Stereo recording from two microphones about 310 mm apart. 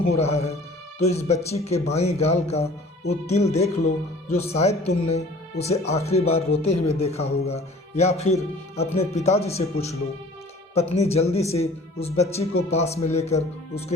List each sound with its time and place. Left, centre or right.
0.0 s a man's voice: centre